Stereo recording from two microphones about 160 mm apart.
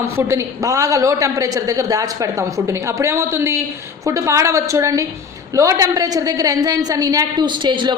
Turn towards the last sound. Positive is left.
turn(degrees=-30)  # may be behind; listen again after turning